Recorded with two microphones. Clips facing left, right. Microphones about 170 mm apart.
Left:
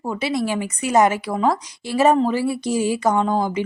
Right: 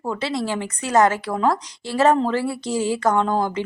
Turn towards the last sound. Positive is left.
turn(degrees=10)  # may be behind; listen again after turning